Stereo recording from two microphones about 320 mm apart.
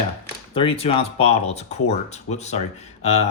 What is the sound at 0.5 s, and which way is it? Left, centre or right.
Speech, centre.